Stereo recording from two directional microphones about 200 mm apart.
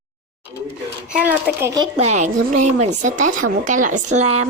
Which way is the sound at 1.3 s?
10° right (ahead or behind).